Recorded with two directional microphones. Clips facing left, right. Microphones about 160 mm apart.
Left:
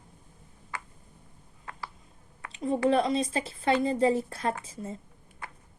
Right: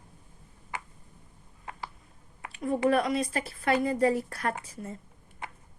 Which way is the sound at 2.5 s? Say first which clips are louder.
Left 1 dB; 25° left (ahead or behind).